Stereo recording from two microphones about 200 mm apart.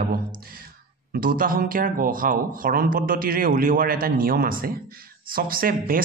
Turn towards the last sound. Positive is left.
turn(degrees=-45)  # may be behind; listen again after turning